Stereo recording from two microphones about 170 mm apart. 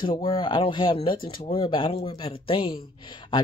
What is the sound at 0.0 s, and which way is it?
Speech, 30° left (ahead or behind).